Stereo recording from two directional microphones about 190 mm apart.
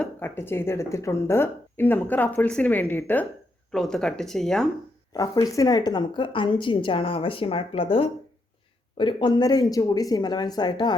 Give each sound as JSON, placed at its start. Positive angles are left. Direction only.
{"t": 0.0, "sound": "speech", "side_deg": 10}
{"t": 5.1, "sound": "a woman's voice", "side_deg": 20}